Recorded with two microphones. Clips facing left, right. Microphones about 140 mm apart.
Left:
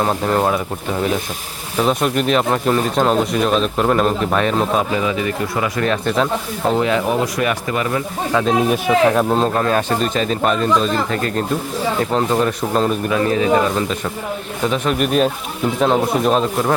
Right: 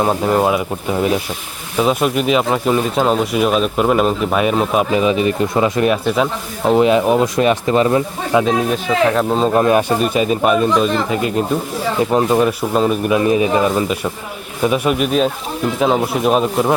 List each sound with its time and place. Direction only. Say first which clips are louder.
0.0 s speech: right 2 dB; 10° right (ahead or behind)
1.8 s speech: right 2 dB; 5° right (ahead or behind); by 8.0 s 25° right (ahead or behind)
8.3 s speech: right 4 dB; 15° right (ahead or behind)
8.7 s speech: left 1 dB; 10° left (ahead or behind)
9.5 s speech: right 4 dB; 15° right (ahead or behind)